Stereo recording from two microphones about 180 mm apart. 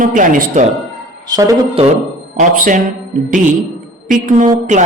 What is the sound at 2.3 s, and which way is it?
Speech, 45° right (ahead or behind).